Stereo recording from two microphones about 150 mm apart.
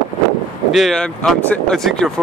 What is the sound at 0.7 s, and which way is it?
Speech, centre (ahead or behind).